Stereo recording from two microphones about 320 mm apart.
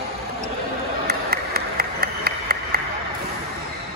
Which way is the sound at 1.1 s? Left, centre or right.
Right.